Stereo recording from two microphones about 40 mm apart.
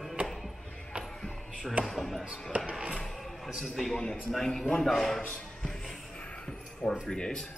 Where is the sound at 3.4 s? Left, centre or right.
Centre.